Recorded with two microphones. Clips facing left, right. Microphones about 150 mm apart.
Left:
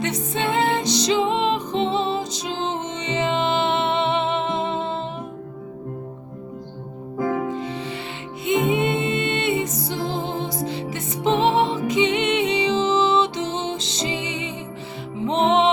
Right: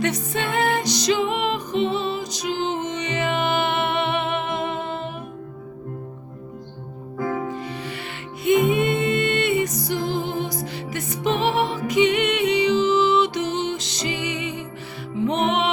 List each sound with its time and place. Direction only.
0.0 s music: 25° left (ahead or behind)
7.3 s music: 20° left (ahead or behind)